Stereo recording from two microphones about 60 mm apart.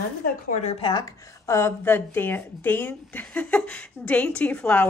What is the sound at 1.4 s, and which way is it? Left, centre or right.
Speech, left.